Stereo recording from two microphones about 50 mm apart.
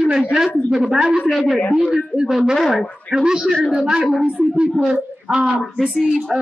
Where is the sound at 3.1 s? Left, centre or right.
Centre.